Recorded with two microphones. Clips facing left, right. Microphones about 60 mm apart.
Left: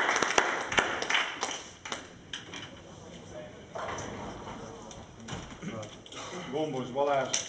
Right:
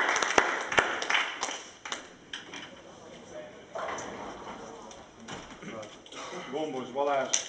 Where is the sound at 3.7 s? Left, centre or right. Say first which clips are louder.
Right 1 dB; centre.